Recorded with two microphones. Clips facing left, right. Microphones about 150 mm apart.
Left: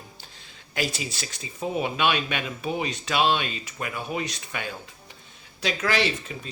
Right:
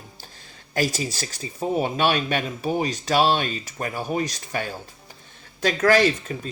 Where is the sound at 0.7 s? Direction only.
40° right (ahead or behind).